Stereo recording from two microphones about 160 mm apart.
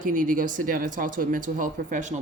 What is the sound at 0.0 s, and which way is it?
Speech, 55° right (ahead or behind).